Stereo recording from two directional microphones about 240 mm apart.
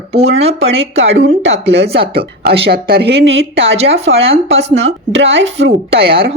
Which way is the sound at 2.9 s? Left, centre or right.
Right.